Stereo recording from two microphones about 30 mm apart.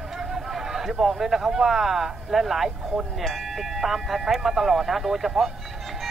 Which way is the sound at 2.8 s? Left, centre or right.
Right.